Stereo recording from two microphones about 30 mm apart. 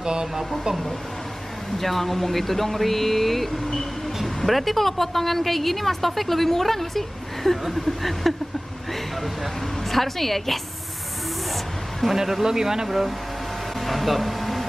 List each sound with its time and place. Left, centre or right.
0.0 s speech: right
1.8 s a woman's voice: centre
9.8 s a woman's voice: centre
12.2 s a man's voice: centre
13.7 s a sound: centre